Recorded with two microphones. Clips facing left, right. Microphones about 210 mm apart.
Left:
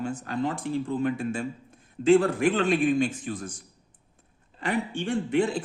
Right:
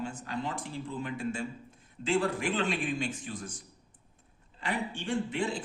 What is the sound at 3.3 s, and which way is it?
Speech, 50° left (ahead or behind).